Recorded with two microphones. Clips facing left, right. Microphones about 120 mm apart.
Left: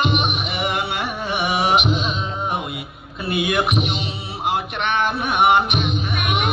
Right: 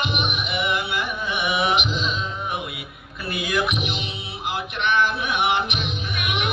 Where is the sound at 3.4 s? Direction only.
60° left (ahead or behind).